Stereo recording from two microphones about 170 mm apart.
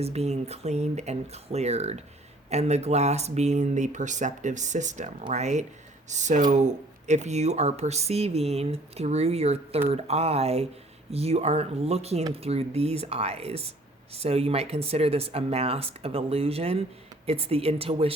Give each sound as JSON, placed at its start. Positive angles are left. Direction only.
{"t": 0.0, "sound": "speech", "side_deg": -40}